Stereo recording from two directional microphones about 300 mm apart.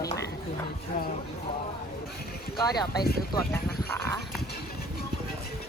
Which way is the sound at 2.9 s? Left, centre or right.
Left.